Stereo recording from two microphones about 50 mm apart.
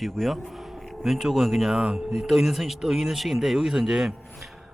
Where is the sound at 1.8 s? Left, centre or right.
Centre.